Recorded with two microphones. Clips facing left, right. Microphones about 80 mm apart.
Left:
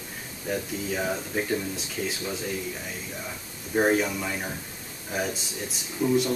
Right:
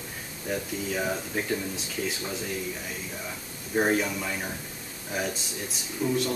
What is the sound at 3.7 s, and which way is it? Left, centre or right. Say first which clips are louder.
Speech: left 2 dB; centre.